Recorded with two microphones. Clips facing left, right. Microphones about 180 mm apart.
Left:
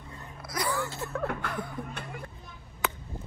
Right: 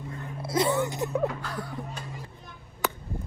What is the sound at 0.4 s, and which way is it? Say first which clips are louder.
Speech: right 7 dB; 25° right (ahead or behind).